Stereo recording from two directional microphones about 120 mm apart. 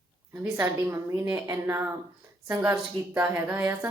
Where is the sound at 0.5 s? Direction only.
20° right (ahead or behind).